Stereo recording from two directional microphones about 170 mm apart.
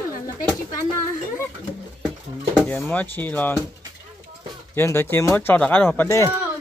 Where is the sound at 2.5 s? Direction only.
10° left (ahead or behind).